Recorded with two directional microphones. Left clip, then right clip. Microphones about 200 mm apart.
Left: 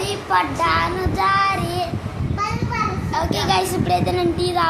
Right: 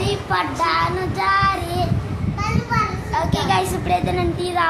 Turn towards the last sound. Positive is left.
turn(degrees=10)  # may be behind; listen again after turning